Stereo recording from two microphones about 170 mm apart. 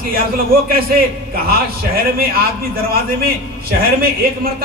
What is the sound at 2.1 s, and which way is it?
A man's voice, 60° right (ahead or behind).